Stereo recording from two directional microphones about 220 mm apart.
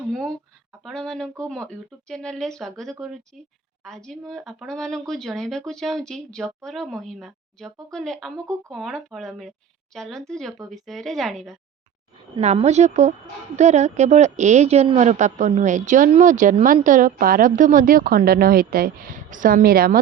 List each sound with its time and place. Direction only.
0.1 s a sound: centre (ahead or behind)
0.9 s speech: centre (ahead or behind)
12.4 s a woman's voice: 30° right (ahead or behind)